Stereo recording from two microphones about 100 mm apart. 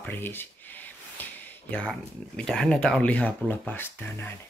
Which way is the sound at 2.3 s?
10° left (ahead or behind).